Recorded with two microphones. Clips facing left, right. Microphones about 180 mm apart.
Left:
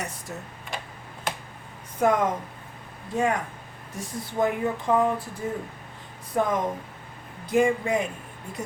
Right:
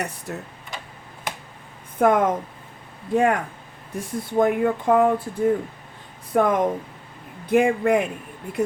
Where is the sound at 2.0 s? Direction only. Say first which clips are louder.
Right 4 dB; 55° right (ahead or behind).